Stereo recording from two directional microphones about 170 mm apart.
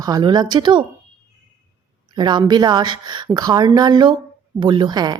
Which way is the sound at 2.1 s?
25° right (ahead or behind).